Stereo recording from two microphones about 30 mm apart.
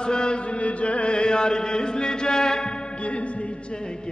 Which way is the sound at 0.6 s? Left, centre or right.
Left.